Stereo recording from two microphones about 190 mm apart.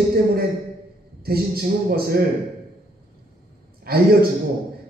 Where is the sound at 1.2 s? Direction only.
55° right (ahead or behind).